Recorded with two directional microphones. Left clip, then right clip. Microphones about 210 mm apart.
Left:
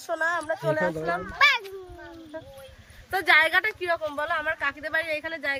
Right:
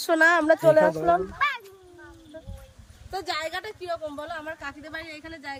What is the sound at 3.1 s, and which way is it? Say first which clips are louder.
Speech: left 10 dB; 10° left (ahead or behind).